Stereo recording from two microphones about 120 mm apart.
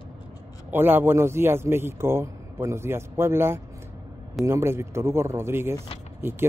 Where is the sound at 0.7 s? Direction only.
15° right (ahead or behind).